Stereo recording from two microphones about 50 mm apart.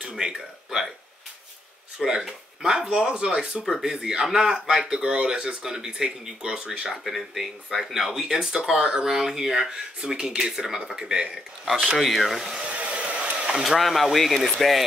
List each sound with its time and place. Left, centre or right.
0.0 s speech: centre
2.0 s speech: centre
6.9 s speech: centre
12.0 s speech: centre
12.7 s a sound: right
13.7 s speech: centre